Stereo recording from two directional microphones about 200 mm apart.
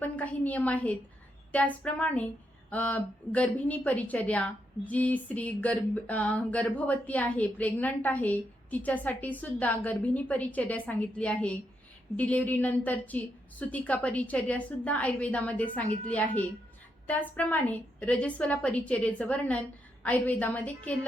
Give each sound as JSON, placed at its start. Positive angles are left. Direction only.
{"t": 0.0, "sound": "a woman's voice", "side_deg": 10}